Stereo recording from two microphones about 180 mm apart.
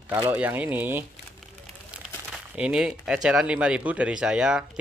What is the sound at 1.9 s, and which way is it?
Crumpling, 5° right (ahead or behind).